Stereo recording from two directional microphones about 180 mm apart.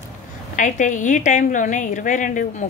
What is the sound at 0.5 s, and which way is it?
A woman's voice, 45° left (ahead or behind).